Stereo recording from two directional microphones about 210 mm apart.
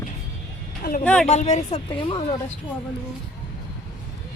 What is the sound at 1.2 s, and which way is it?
Speech, 35° left (ahead or behind).